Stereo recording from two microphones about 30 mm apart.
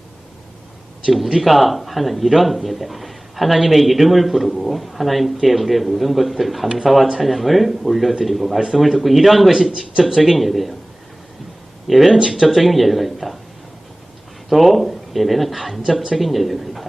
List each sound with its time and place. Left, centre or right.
1.1 s speech: centre
9.5 s speech: centre
10.2 s speech: centre
11.9 s speech: centre
14.5 s speech: centre